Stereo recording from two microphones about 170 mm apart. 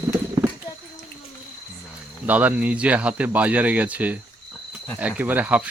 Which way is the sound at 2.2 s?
10° right (ahead or behind).